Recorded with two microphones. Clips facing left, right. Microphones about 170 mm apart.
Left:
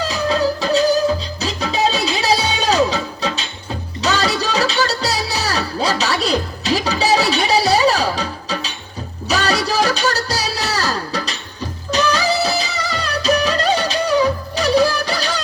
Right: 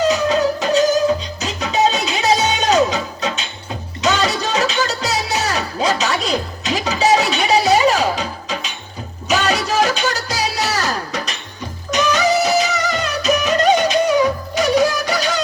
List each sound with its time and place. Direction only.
0.0 s music: 35° left (ahead or behind)